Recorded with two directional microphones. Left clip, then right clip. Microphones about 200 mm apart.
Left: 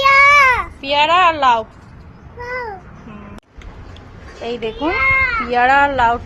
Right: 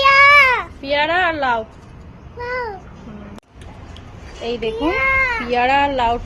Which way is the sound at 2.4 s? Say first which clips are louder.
Right 1 dB; 5° left (ahead or behind).